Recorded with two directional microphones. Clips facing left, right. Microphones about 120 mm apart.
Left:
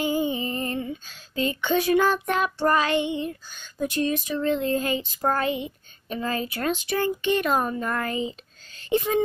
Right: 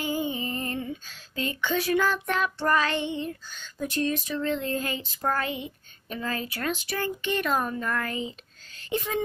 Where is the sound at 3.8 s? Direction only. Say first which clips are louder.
Left 3 dB; 15° left (ahead or behind).